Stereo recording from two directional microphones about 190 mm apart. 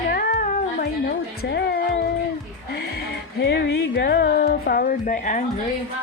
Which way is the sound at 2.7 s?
60° left (ahead or behind).